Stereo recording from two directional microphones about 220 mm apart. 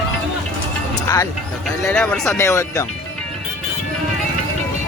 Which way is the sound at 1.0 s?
15° left (ahead or behind).